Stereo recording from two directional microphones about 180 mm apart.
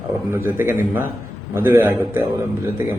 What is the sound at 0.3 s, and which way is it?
A man's voice, 15° right (ahead or behind).